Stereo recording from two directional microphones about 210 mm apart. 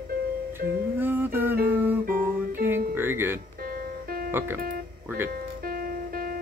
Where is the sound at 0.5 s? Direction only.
10° right (ahead or behind).